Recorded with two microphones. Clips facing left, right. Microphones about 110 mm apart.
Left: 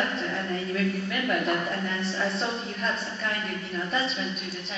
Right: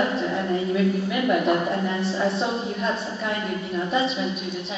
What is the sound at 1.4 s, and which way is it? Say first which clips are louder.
A woman's voice: right 6 dB; 25° right (ahead or behind).